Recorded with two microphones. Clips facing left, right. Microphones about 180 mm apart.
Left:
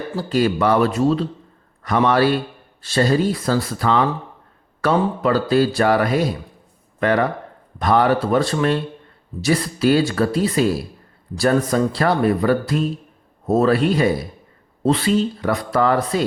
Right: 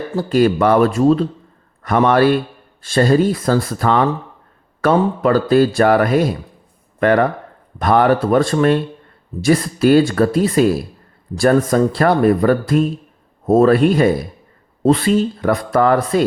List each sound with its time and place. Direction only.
0.2 s a man's voice: 50° right (ahead or behind)